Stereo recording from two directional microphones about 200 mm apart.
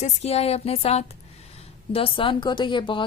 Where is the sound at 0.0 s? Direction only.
30° left (ahead or behind).